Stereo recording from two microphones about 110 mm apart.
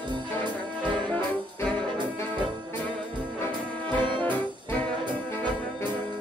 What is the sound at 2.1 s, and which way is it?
Trombone, 15° left (ahead or behind).